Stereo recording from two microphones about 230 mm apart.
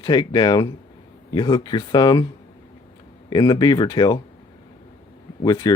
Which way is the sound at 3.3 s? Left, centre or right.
Centre.